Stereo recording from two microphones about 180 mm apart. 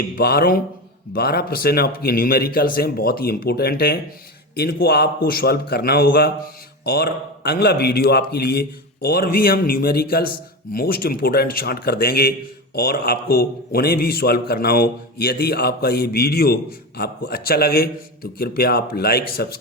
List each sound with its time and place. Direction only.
0.0 s a man's voice: 60° left (ahead or behind)